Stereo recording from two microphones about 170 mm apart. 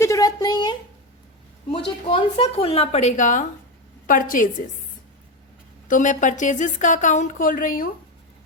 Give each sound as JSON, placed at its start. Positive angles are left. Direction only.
{"t": 0.0, "sound": "a sound", "side_deg": 20}
{"t": 2.0, "sound": "a woman's voice", "side_deg": 30}
{"t": 5.9, "sound": "speech", "side_deg": 50}